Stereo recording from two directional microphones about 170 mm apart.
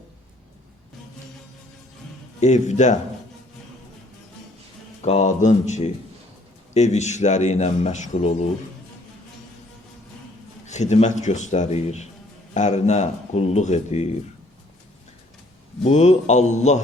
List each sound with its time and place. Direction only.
2.4 s a man's voice: 45° left (ahead or behind)
5.0 s a man's voice: 45° left (ahead or behind)
10.7 s a man's voice: 40° left (ahead or behind)
15.8 s a man's voice: 45° left (ahead or behind)